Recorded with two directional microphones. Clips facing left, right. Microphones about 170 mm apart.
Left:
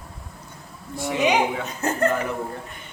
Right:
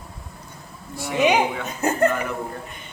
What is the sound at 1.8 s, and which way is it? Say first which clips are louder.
Speech: right 3 dB; 10° right (ahead or behind).